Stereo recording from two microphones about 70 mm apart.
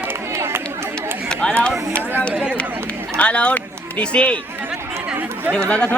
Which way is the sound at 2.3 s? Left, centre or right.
Centre.